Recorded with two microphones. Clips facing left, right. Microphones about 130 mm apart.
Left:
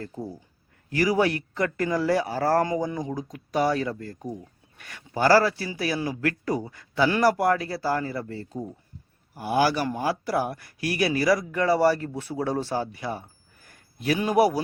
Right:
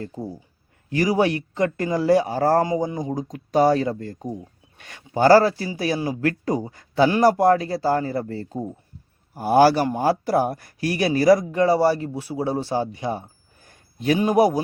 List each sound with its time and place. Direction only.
0.0 s speech: 15° right (ahead or behind)
0.9 s speech: 25° right (ahead or behind)
3.3 s speech: 30° right (ahead or behind)